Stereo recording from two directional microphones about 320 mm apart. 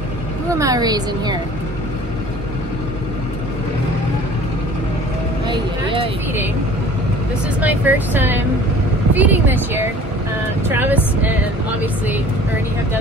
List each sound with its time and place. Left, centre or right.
0.5 s speech: centre
5.5 s speech: centre
7.6 s speech: centre